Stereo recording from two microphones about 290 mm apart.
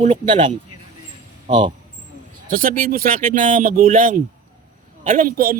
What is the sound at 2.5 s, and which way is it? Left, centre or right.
A man's voice, right.